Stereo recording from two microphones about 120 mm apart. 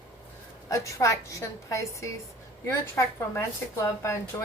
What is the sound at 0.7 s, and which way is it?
Speech, 25° left (ahead or behind).